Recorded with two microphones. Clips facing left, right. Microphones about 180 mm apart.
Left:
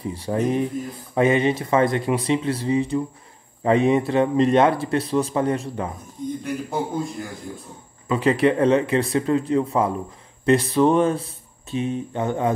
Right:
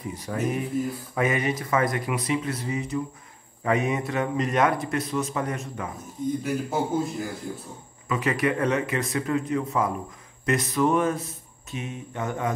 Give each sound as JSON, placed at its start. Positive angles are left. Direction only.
{"t": 0.0, "sound": "a man's voice", "side_deg": 30}
{"t": 6.4, "sound": "a man's voice", "side_deg": -5}
{"t": 8.1, "sound": "a man's voice", "side_deg": 30}